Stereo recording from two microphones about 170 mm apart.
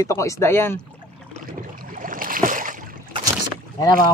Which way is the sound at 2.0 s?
55° right (ahead or behind).